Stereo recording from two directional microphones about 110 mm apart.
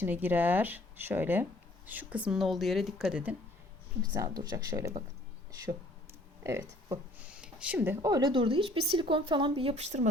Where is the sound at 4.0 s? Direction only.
35° right (ahead or behind).